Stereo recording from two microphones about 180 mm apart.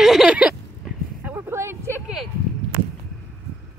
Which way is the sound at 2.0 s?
Centre (ahead or behind).